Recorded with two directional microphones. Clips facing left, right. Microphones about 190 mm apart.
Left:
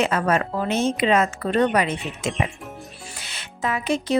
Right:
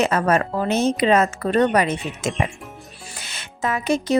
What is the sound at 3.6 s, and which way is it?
Speech, 45° right (ahead or behind).